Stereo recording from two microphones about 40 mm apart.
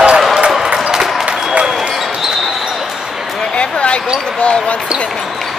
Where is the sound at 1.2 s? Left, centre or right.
Right.